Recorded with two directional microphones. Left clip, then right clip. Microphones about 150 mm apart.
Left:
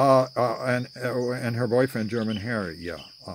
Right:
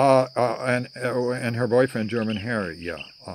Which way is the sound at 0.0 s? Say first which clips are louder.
Right 1 dB; 15° left (ahead or behind).